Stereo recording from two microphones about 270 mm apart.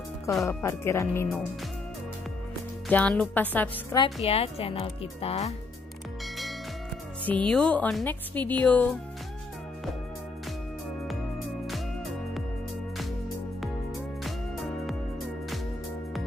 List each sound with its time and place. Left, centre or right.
0.3 s speech: centre
2.9 s speech: centre
4.0 s speech: left
7.2 s speech: centre